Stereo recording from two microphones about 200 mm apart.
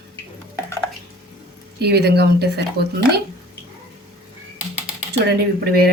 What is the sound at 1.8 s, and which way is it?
Speech, 55° right (ahead or behind).